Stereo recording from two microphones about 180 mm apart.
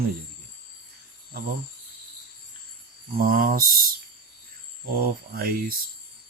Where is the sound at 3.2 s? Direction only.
50° right (ahead or behind).